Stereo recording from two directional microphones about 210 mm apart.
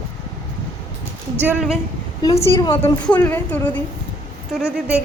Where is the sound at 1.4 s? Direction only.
Centre (ahead or behind).